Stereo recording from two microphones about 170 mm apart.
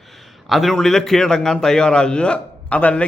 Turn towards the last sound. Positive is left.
turn(degrees=10)  # may be behind; listen again after turning